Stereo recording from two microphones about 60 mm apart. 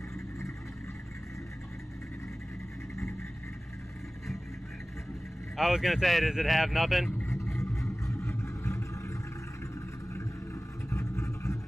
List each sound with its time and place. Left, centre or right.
5.6 s speech: centre
7.2 s vehicle: left
10.9 s vehicle: left